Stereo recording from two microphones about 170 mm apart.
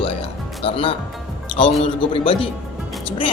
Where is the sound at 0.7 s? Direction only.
30° left (ahead or behind).